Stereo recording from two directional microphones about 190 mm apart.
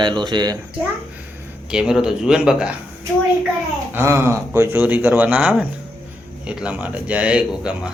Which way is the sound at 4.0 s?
15° right (ahead or behind).